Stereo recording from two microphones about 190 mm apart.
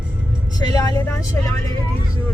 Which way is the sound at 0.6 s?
20° left (ahead or behind).